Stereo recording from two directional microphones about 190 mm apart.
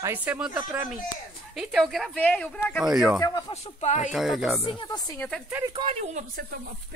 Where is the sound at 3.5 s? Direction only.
35° left (ahead or behind).